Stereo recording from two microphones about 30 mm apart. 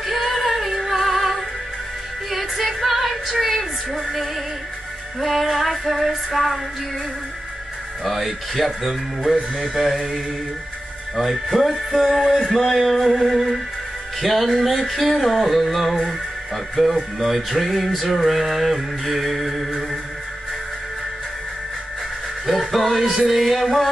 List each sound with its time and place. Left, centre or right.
0.0 s female singing: centre
2.3 s music: centre
8.0 s music: centre
9.8 s mantra: centre
11.1 s music: centre
22.5 s music: centre